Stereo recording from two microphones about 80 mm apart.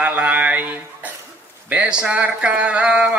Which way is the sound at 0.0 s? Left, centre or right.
Centre.